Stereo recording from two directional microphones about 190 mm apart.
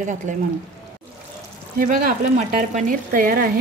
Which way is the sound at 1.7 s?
50° right (ahead or behind).